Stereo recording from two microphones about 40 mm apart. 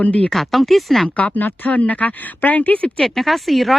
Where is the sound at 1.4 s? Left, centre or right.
Left.